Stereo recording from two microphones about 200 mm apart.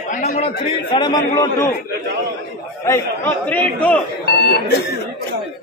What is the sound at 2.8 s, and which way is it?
A man's voice, 10° left (ahead or behind).